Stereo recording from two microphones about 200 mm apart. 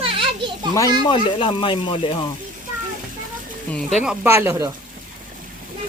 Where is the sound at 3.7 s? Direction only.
Centre (ahead or behind).